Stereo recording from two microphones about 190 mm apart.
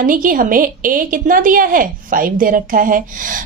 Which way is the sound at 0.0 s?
45° right (ahead or behind).